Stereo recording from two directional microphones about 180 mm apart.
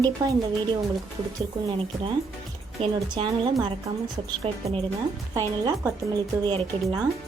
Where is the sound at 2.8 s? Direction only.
25° right (ahead or behind).